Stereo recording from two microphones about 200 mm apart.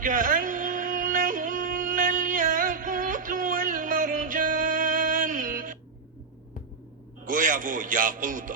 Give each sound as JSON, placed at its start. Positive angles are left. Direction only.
{"t": 0.0, "sound": "yodeling", "side_deg": -40}
{"t": 7.3, "sound": "a man's voice", "side_deg": -40}